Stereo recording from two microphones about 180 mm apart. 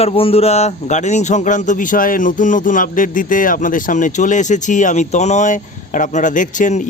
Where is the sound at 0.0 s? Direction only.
30° left (ahead or behind).